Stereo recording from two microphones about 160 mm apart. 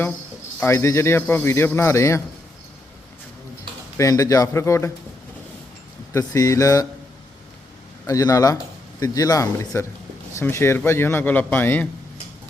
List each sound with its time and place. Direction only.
0.6 s a man's voice: 15° left (ahead or behind)
3.9 s a man's voice: 20° left (ahead or behind)
6.1 s a man's voice: 20° left (ahead or behind)
8.0 s a man's voice: 20° left (ahead or behind)